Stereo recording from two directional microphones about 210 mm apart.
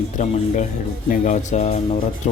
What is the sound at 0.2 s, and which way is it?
A man's voice, 35° left (ahead or behind).